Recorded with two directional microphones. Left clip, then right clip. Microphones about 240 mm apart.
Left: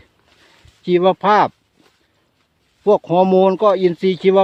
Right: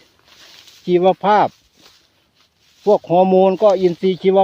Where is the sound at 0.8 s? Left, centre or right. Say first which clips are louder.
Even; centre.